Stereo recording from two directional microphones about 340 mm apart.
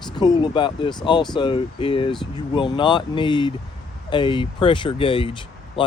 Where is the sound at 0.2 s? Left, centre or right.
Centre.